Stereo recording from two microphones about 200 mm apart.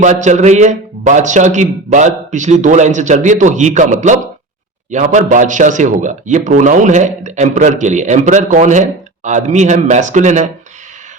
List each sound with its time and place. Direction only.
0.0 s a man's voice: 35° right (ahead or behind)